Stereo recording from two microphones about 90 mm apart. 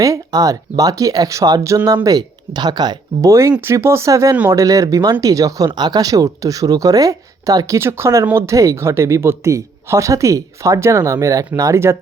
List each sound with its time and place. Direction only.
0.0 s speech: 40° right (ahead or behind)
3.2 s speech: 35° right (ahead or behind)
7.8 s speech: 30° right (ahead or behind)